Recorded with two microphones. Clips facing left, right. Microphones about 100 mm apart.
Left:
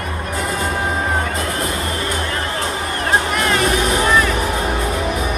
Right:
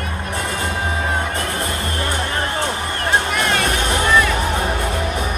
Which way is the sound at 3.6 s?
30° left (ahead or behind).